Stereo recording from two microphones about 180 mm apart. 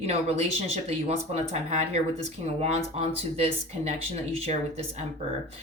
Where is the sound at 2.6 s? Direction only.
35° right (ahead or behind).